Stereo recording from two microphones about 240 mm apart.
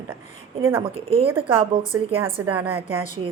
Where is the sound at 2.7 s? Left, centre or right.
Right.